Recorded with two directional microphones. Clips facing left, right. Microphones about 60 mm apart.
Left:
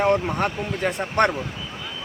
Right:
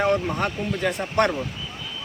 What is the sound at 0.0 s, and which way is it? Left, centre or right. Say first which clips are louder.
Speech: left 2 dB; left.